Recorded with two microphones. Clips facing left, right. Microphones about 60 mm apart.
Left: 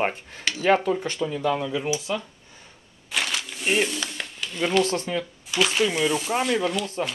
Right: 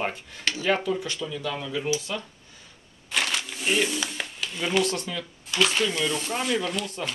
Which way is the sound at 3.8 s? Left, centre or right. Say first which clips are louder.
Right 1 dB; centre.